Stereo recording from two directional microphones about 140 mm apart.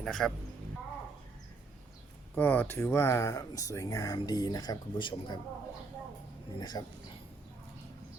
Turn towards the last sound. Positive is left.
turn(degrees=30)  # may be behind; listen again after turning